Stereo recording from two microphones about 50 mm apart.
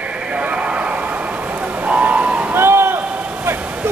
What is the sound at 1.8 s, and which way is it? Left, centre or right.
Vehicle, right.